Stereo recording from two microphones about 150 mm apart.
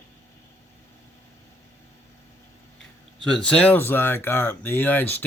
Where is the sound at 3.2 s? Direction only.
5° left (ahead or behind).